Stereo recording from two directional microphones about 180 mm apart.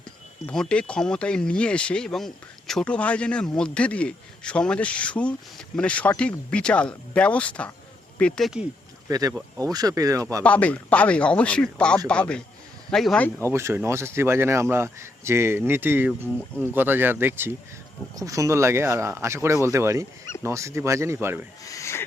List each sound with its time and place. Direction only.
0.4 s speech: 5° left (ahead or behind)
9.0 s speech: 20° right (ahead or behind)
10.4 s speech: 10° left (ahead or behind)
13.4 s speech: 15° right (ahead or behind)
21.6 s a sound: 20° left (ahead or behind)